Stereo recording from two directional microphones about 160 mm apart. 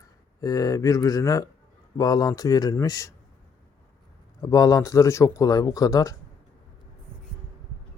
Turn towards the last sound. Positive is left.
turn(degrees=20)  # may be behind; listen again after turning